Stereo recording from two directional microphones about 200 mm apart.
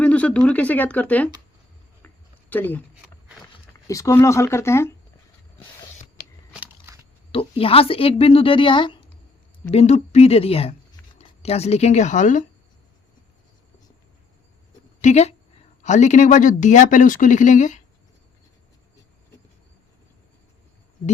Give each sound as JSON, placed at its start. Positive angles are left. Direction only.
{"t": 0.0, "sound": "speech", "side_deg": 5}
{"t": 2.5, "sound": "speech", "side_deg": 10}
{"t": 3.8, "sound": "speech", "side_deg": 15}
{"t": 6.5, "sound": "shuffling cards", "side_deg": -10}
{"t": 7.3, "sound": "speech", "side_deg": 25}
{"t": 9.6, "sound": "speech", "side_deg": 35}
{"t": 15.0, "sound": "speech", "side_deg": 35}